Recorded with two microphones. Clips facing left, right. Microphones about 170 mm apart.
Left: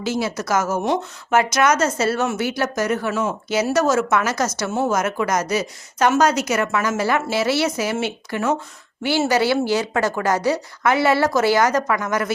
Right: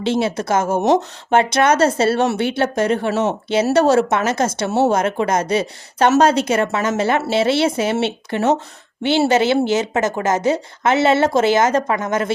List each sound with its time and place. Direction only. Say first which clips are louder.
0.0 s speech: right 4 dB; 25° right (ahead or behind)